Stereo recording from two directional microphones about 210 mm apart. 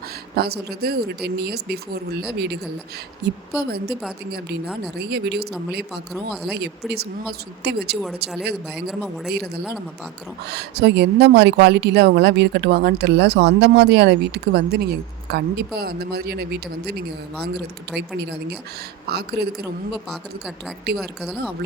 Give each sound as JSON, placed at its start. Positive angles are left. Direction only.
{"t": 0.3, "sound": "speech", "side_deg": -50}
{"t": 3.2, "sound": "speech", "side_deg": -55}
{"t": 8.7, "sound": "speech", "side_deg": 0}
{"t": 10.4, "sound": "speech", "side_deg": -50}
{"t": 17.9, "sound": "speech", "side_deg": -50}
{"t": 20.9, "sound": "speech", "side_deg": 0}